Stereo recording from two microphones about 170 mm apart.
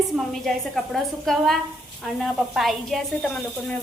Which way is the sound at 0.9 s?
Centre (ahead or behind).